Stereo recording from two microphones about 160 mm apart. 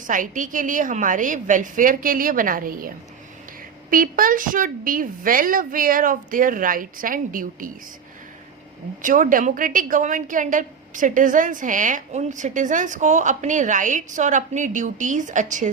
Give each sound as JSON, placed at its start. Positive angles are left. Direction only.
{"t": 0.1, "sound": "a woman's voice", "side_deg": -55}
{"t": 9.0, "sound": "a woman's voice", "side_deg": -55}